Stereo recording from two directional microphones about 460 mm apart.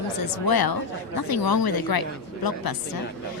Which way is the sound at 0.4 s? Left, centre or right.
Left.